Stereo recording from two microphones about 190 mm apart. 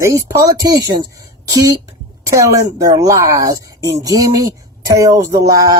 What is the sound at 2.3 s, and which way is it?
Speech, 15° right (ahead or behind).